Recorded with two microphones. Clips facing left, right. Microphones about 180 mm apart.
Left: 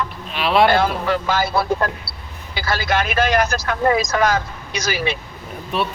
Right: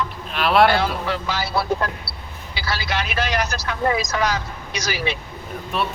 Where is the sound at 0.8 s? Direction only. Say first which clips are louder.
Left 4 dB; 50° left (ahead or behind).